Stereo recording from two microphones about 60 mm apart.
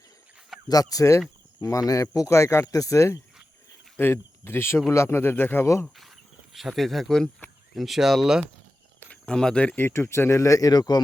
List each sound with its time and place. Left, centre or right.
0.7 s speech: left
2.7 s speech: left
3.9 s a man's voice: left
6.0 s speech: centre
7.8 s speech: centre
9.0 s speech: centre
9.8 s speech: left